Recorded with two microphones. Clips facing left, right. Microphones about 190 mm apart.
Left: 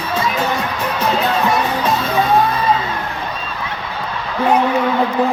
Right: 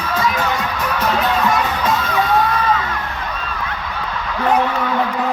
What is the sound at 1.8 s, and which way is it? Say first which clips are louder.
Music: left 2 dB; 30° left (ahead or behind).